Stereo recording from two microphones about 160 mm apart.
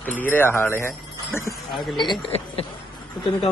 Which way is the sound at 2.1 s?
35° left (ahead or behind).